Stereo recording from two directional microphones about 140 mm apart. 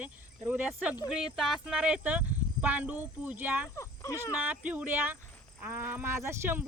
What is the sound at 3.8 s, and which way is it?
Speech, 20° left (ahead or behind).